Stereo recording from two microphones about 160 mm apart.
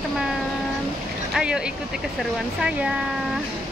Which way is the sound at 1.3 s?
5° right (ahead or behind).